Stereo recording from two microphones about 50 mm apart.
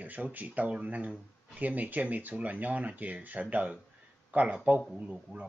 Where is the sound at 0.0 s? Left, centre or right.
Right; by 5.5 s centre.